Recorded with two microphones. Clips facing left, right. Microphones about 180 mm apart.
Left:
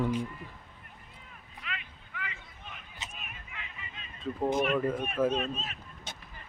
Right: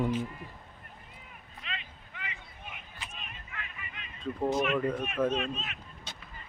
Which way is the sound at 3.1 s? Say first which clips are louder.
Right 1 dB; 5° left (ahead or behind).